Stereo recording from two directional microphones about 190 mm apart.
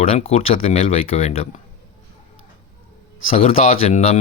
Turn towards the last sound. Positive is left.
turn(degrees=35)  # may be behind; listen again after turning